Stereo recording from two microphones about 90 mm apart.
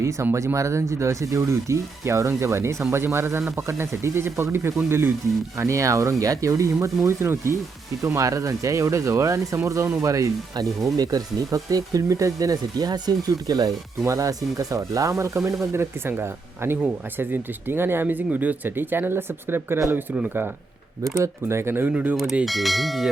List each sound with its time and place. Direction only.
0.0 s speech: 35° right (ahead or behind)
21.4 s speech: 25° right (ahead or behind)
22.1 s speech: 5° right (ahead or behind)